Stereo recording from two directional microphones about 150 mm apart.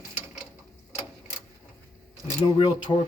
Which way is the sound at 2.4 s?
35° left (ahead or behind).